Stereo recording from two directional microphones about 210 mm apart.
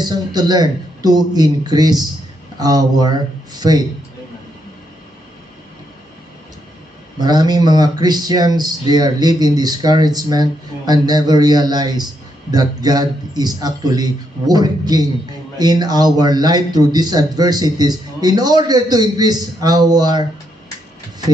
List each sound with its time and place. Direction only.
0.0 s speech: 20° right (ahead or behind)
7.2 s speech: 20° right (ahead or behind)